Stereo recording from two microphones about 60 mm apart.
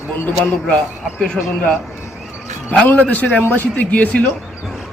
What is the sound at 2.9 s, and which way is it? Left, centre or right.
A man's voice, left.